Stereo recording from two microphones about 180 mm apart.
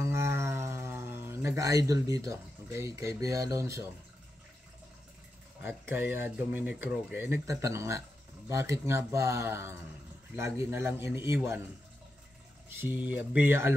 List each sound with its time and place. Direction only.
0.0 s a sound: 15° right (ahead or behind)
5.6 s speech: 10° right (ahead or behind)
12.6 s speech: 10° right (ahead or behind)